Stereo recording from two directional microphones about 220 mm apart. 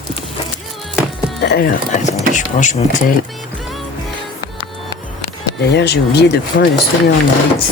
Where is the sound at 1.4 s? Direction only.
45° left (ahead or behind).